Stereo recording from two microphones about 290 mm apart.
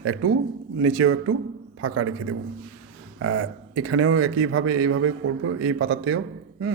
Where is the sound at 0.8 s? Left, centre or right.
Right.